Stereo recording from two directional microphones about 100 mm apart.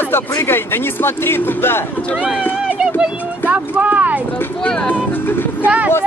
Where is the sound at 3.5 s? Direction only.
15° right (ahead or behind).